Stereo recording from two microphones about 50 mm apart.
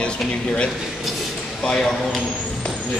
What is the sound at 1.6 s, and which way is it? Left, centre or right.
Speech, centre.